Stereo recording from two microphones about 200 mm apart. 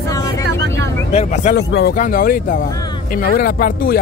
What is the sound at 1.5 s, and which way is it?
A man's voice, 50° left (ahead or behind).